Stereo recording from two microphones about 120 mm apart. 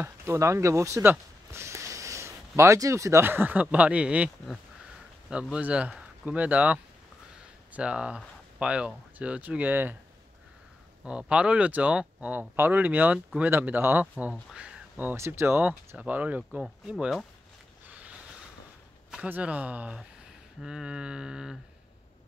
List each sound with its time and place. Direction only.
0.0 s speech: 25° right (ahead or behind)
11.1 s speech: 10° right (ahead or behind)
14.3 s speech: 5° right (ahead or behind)
15.0 s speech: 20° right (ahead or behind); by 17.3 s centre (ahead or behind)
19.0 s speech: 10° right (ahead or behind)